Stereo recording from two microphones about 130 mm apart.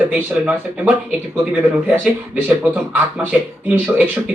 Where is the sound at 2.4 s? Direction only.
10° right (ahead or behind).